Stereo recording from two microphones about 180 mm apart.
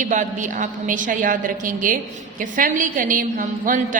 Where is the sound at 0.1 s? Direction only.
45° right (ahead or behind).